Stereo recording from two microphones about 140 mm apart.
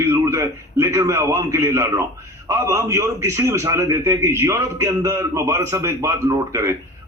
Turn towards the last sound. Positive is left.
turn(degrees=-20)  # may be behind; listen again after turning